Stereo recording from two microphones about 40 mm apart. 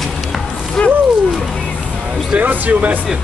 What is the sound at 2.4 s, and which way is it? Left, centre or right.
Speech, right.